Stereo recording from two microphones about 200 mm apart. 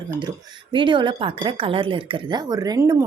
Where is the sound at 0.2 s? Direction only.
25° right (ahead or behind).